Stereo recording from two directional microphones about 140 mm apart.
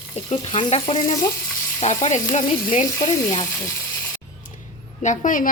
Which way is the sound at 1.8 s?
60° left (ahead or behind).